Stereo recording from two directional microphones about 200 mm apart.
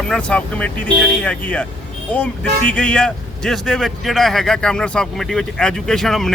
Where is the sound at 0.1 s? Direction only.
5° left (ahead or behind).